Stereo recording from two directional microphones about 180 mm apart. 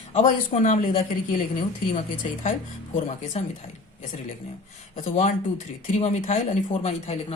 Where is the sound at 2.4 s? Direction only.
45° left (ahead or behind).